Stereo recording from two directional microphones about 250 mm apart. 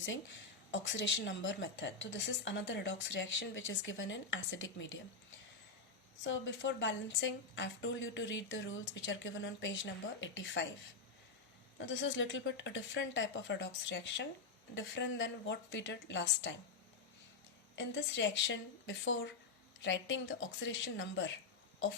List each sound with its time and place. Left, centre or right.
0.7 s a woman's voice: left
6.2 s a woman's voice: left
11.8 s a woman's voice: left
17.7 s a woman's voice: left